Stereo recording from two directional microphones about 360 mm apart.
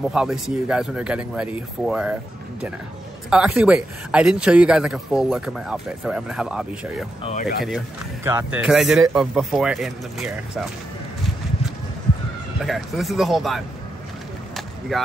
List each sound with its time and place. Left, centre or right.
0.1 s speech: centre
3.3 s speech: centre
7.3 s speech: left
7.6 s speech: centre
12.6 s speech: centre
14.9 s speech: centre